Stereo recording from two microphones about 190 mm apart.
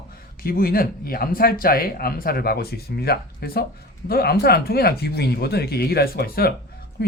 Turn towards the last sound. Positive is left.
turn(degrees=60)  # may be behind; listen again after turning